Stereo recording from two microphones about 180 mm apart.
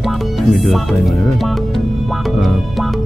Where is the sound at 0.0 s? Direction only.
Centre (ahead or behind).